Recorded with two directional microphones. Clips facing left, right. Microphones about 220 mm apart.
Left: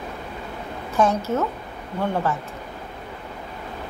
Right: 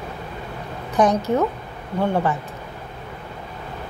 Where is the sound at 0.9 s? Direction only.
15° right (ahead or behind).